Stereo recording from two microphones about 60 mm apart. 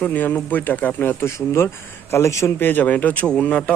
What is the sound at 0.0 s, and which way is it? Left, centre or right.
Speech, left.